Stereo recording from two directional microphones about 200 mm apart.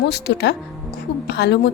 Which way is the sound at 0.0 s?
55° left (ahead or behind).